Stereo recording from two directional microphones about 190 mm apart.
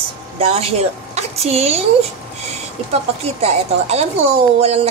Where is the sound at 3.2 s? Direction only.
35° right (ahead or behind).